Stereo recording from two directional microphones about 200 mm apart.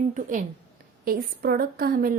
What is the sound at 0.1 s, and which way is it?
A woman's voice, 40° right (ahead or behind).